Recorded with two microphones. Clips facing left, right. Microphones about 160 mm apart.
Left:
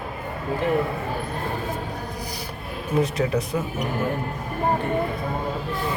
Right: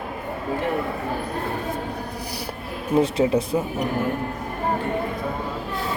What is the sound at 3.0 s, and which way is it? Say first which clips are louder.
Speech: right 3 dB; 30° right (ahead or behind).